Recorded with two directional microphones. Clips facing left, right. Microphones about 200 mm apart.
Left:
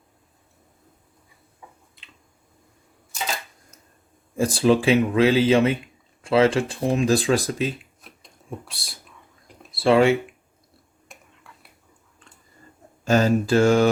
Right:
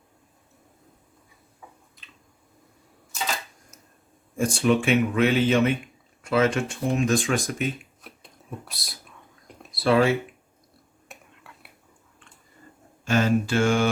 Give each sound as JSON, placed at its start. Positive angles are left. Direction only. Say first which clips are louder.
{"t": 4.5, "sound": "speech", "louder": "left 3 dB", "side_deg": 35}
{"t": 11.1, "sound": "finger snapping", "louder": "right 1 dB", "side_deg": -5}
{"t": 13.1, "sound": "speech", "louder": "left 3 dB", "side_deg": 40}